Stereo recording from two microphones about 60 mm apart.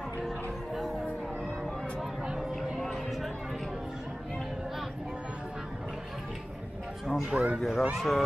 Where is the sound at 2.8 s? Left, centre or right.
Centre.